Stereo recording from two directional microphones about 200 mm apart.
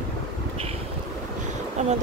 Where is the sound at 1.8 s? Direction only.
35° right (ahead or behind).